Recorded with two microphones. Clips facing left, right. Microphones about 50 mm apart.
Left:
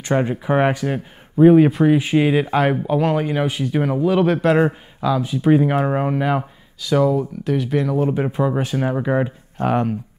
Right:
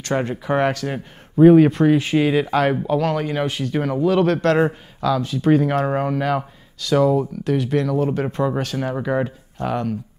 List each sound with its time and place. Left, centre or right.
0.0 s speech: centre
0.4 s speech: left
0.8 s speech: centre
9.6 s speech: left